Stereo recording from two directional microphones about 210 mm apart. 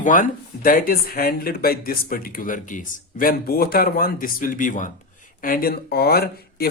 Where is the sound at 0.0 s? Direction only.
40° left (ahead or behind).